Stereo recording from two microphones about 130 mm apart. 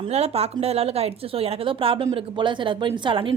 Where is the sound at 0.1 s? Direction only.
55° right (ahead or behind).